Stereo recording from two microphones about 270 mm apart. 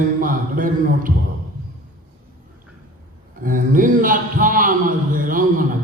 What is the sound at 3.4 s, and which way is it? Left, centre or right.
Speech, right.